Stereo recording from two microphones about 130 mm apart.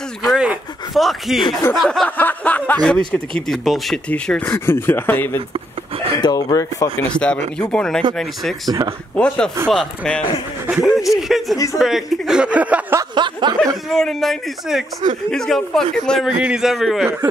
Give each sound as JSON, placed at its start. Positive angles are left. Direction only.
{"t": 0.2, "sound": "a sound", "side_deg": -5}
{"t": 1.7, "sound": "a man's voice", "side_deg": 0}
{"t": 4.1, "sound": "speech", "side_deg": 15}
{"t": 6.2, "sound": "speech", "side_deg": 25}
{"t": 7.2, "sound": "a man's voice", "side_deg": 10}
{"t": 11.5, "sound": "speech", "side_deg": 25}
{"t": 11.8, "sound": "speech", "side_deg": 0}
{"t": 13.1, "sound": "a sound", "side_deg": -35}
{"t": 13.8, "sound": "a man's voice", "side_deg": 5}